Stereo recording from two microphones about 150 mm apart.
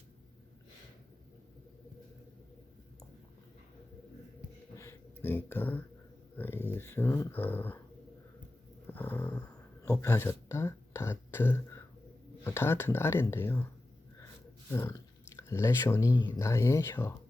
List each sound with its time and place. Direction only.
4.8 s a sound: 15° left (ahead or behind)
6.3 s speech: 15° left (ahead or behind)
8.9 s snoring: 10° left (ahead or behind)
9.8 s speech: 20° left (ahead or behind)
14.7 s speech: 20° left (ahead or behind)